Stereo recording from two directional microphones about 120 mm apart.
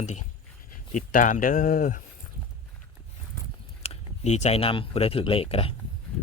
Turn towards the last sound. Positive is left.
turn(degrees=50)  # may be behind; listen again after turning